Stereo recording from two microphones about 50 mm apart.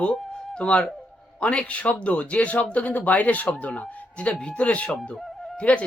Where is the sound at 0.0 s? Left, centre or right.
Centre.